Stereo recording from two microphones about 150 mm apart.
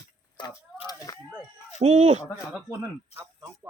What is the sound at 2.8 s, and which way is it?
Speech, 15° right (ahead or behind).